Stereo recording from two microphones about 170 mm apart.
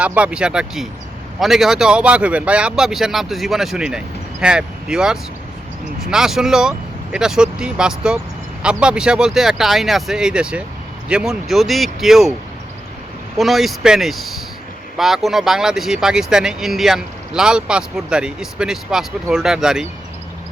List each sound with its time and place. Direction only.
0.0 s speech: 10° right (ahead or behind)
13.3 s speech: centre (ahead or behind)